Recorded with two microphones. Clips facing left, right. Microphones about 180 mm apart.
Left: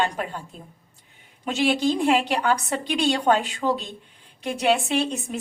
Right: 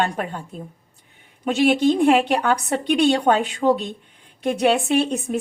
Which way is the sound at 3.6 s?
30° right (ahead or behind).